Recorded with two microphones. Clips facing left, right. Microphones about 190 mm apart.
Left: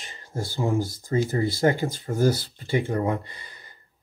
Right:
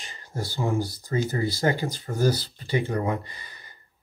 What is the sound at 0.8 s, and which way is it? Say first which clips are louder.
Speech: left 1 dB; 45° left (ahead or behind).